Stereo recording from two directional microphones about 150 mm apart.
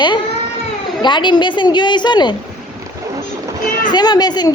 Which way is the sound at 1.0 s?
30° left (ahead or behind).